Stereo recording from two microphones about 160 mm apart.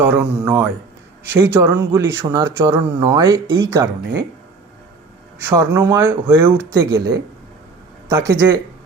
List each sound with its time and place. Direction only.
0.0 s speech: 15° right (ahead or behind)
5.4 s speech: 15° right (ahead or behind)
8.1 s speech: 20° right (ahead or behind)